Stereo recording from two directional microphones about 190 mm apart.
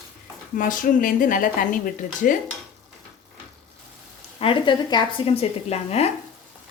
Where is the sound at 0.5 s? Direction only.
45° left (ahead or behind).